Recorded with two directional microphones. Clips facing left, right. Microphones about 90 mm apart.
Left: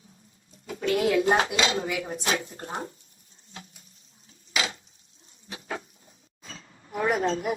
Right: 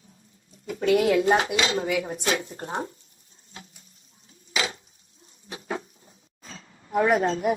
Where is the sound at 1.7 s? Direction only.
35° right (ahead or behind).